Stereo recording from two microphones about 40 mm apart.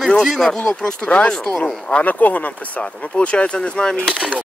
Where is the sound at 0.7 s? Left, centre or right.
Centre.